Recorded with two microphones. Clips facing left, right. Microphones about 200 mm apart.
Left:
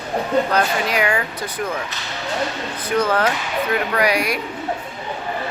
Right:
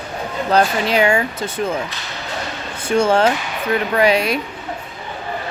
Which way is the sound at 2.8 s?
30° right (ahead or behind).